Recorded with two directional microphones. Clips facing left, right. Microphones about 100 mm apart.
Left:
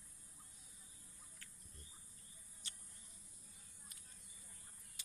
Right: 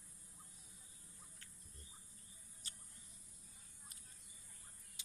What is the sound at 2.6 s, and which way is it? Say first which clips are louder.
Mouse: even; 40° right (ahead or behind).